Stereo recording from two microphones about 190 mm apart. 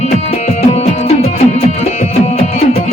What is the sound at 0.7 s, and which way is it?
Music, 35° left (ahead or behind).